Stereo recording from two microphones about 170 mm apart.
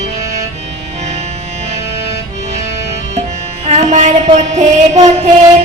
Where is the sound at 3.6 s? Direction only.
45° right (ahead or behind).